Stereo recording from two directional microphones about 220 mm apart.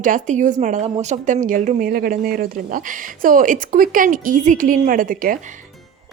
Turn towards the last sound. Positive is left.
turn(degrees=-35)  # may be behind; listen again after turning